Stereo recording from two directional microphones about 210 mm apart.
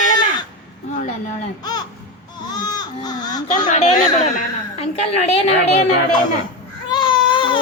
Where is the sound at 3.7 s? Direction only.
30° left (ahead or behind).